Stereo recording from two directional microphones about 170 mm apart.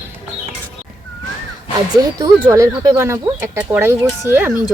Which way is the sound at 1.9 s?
20° right (ahead or behind).